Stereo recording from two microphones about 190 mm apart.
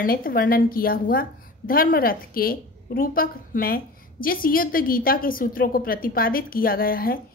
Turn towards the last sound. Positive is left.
turn(degrees=50)  # may be behind; listen again after turning